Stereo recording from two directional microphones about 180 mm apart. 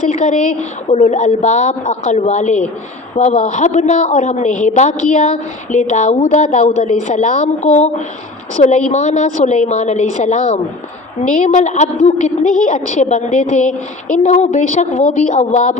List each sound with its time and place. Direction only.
0.1 s a woman's voice: 45° left (ahead or behind)